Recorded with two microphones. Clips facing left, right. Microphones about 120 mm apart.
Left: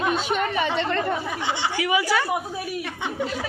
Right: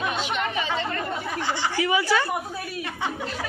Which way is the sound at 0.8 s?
75° left (ahead or behind).